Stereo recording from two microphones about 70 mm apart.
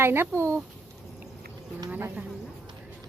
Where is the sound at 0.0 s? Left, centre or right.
Right.